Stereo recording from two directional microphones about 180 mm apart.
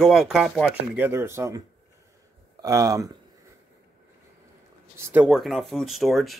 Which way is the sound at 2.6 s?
20° right (ahead or behind).